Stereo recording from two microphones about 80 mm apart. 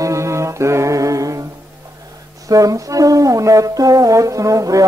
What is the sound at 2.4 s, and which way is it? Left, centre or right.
Music, right.